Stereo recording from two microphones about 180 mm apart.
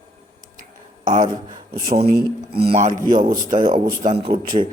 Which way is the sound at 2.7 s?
40° right (ahead or behind).